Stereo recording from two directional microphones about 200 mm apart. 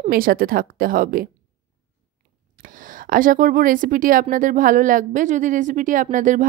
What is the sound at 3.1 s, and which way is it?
Speech, 45° right (ahead or behind).